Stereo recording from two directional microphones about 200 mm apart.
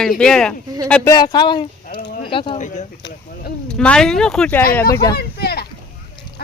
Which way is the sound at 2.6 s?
35° left (ahead or behind).